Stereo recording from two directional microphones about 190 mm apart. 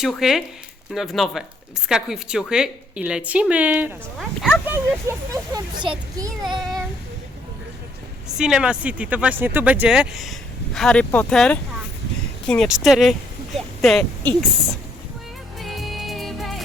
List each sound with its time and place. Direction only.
0.0 s a woman's voice: centre (ahead or behind)
4.6 s speech: 10° right (ahead or behind)
8.4 s a woman's voice: 5° right (ahead or behind)
15.5 s music: centre (ahead or behind)